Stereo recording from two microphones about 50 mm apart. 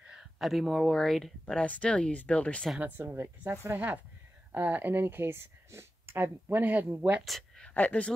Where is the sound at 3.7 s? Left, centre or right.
Right.